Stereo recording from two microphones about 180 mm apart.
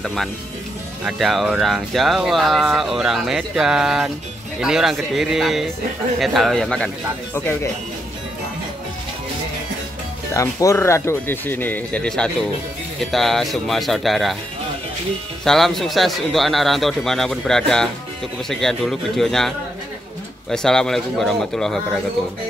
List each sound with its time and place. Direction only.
0.0 s speech: centre (ahead or behind)
10.3 s speech: 15° left (ahead or behind); by 14.3 s centre (ahead or behind)
15.4 s speech: centre (ahead or behind)